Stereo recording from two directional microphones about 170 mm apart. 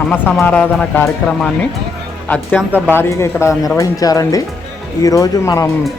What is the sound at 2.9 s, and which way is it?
Speech, 15° left (ahead or behind).